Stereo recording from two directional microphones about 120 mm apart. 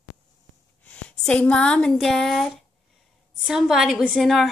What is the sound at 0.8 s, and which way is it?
Speech, 10° left (ahead or behind).